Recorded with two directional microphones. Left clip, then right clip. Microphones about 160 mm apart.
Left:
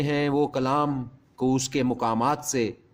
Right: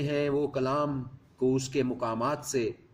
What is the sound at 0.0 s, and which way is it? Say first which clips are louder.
A man's voice: left 4 dB; 55° left (ahead or behind).